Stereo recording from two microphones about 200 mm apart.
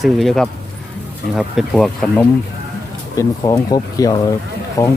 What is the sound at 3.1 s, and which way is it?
Speech, 15° left (ahead or behind).